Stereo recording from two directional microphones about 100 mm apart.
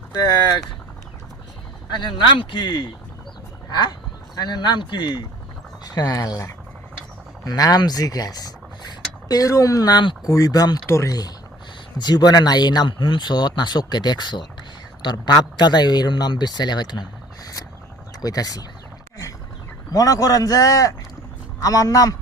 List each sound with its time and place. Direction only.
0.2 s speech: 40° left (ahead or behind)
1.9 s speech: 50° left (ahead or behind)
4.4 s a man's voice: 45° left (ahead or behind)
10.8 s speech: 25° left (ahead or behind)
11.9 s speech: 45° left (ahead or behind)
19.9 s a man's voice: 35° left (ahead or behind)